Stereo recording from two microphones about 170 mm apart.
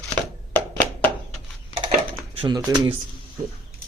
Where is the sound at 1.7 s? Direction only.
40° right (ahead or behind).